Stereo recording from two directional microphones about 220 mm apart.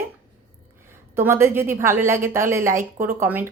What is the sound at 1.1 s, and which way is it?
A woman's voice, 10° right (ahead or behind).